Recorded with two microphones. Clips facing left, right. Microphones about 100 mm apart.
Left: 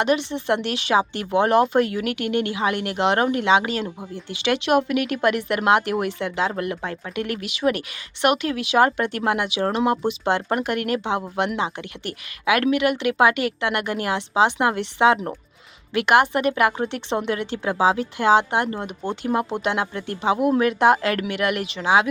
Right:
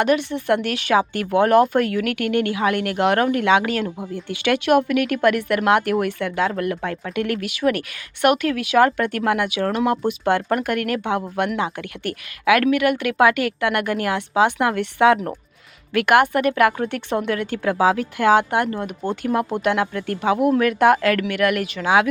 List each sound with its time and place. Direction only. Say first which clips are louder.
0.0 s speech: right 2 dB; 20° left (ahead or behind)